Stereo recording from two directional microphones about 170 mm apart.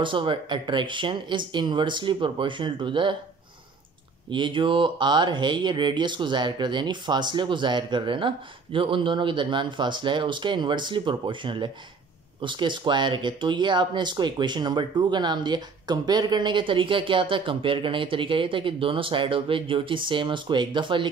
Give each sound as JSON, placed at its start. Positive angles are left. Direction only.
{"t": 0.0, "sound": "speech", "side_deg": -30}
{"t": 4.3, "sound": "speech", "side_deg": -30}